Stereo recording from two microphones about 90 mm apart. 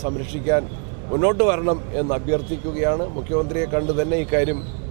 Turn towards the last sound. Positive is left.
turn(degrees=-15)  # may be behind; listen again after turning